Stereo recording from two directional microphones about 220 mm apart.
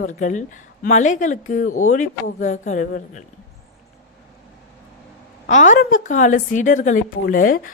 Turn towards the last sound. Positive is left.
turn(degrees=40)  # may be behind; listen again after turning